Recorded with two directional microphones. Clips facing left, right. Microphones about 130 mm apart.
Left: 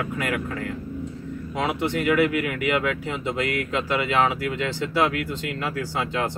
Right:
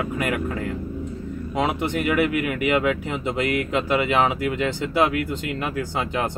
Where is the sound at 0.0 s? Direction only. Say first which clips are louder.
Right 2 dB; 20° right (ahead or behind).